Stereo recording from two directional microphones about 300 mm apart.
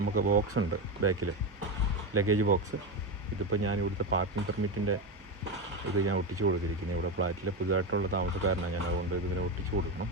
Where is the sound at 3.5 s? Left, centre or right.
Right.